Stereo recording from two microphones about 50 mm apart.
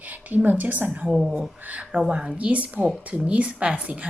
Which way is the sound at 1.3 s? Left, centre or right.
Right.